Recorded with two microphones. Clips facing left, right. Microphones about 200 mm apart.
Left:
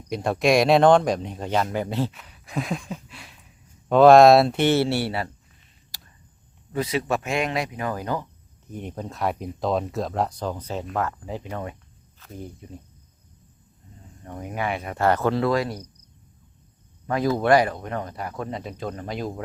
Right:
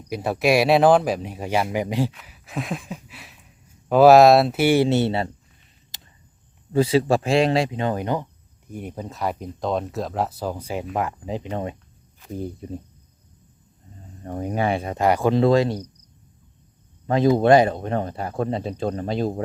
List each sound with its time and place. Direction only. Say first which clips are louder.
0.1 s speech: even; 5° right (ahead or behind)
2.1 s speech: left 1 dB; 5° right (ahead or behind); by 5.3 s 25° right (ahead or behind)
5.9 s a sound: right 1 dB; 20° right (ahead or behind)
6.7 s speech: right 7 dB; 30° right (ahead or behind)
8.7 s speech: right 1 dB; 10° right (ahead or behind)
12.4 s speech: right 7 dB; 35° right (ahead or behind)
14.3 s speech: right 5 dB; 35° right (ahead or behind)
14.9 s speech: right 1 dB; 15° right (ahead or behind)
17.1 s speech: right 4 dB; 25° right (ahead or behind)